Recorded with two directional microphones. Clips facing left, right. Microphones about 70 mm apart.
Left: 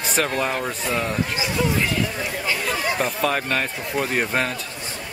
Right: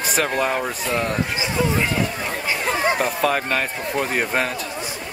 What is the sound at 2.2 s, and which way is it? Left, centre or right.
Chatter, right.